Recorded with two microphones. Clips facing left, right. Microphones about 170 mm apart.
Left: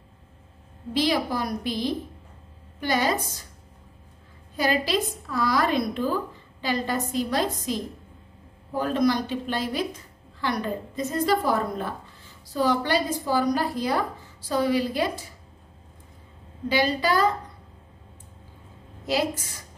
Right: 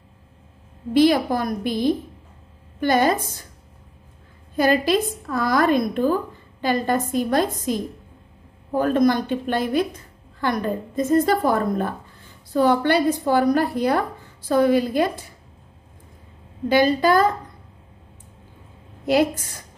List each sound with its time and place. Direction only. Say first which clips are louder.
0.9 s a woman's voice: right 7 dB; 50° right (ahead or behind)
4.6 s a woman's voice: right 6 dB; 50° right (ahead or behind)
16.6 s a woman's voice: right 6 dB; 50° right (ahead or behind)
19.0 s a woman's voice: right 7 dB; 55° right (ahead or behind)